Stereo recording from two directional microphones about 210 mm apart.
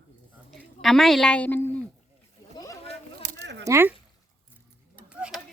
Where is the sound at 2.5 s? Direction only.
15° left (ahead or behind).